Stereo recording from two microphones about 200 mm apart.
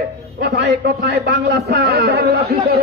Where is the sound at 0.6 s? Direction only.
55° right (ahead or behind).